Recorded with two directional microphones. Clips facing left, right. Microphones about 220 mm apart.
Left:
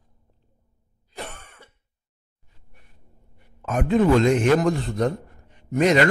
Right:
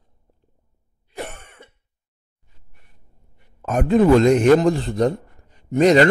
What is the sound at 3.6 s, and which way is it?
A man's voice, 40° right (ahead or behind).